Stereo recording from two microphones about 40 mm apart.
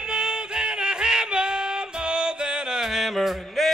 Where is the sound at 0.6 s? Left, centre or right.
Right.